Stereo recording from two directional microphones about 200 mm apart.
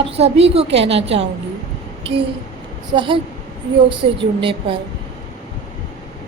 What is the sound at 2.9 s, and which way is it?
Speech, 25° right (ahead or behind).